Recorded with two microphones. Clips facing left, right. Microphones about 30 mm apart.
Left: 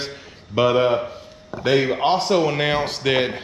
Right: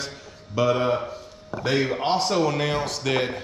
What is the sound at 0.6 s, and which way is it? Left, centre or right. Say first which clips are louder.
Speech: left 4 dB; left.